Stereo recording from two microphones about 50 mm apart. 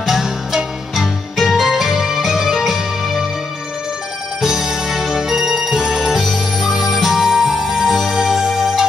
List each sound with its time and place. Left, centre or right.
0.0 s music: centre
4.4 s music: centre